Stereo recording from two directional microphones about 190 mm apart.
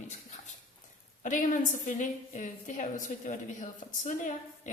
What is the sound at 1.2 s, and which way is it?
A woman's voice, 40° left (ahead or behind).